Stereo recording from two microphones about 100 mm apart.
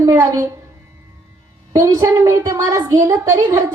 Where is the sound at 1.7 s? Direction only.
30° right (ahead or behind).